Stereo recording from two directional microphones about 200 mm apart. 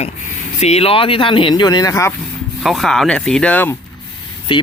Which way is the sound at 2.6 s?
Centre (ahead or behind).